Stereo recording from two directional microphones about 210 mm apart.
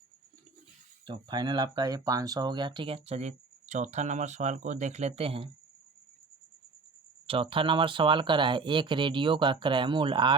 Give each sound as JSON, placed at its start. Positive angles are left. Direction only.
{"t": 1.0, "sound": "speech", "side_deg": -20}
{"t": 7.3, "sound": "speech", "side_deg": -25}